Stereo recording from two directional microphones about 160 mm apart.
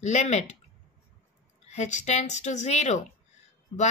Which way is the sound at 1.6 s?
45° left (ahead or behind).